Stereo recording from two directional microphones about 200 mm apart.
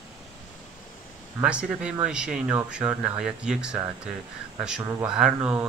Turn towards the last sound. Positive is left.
turn(degrees=-5)  # may be behind; listen again after turning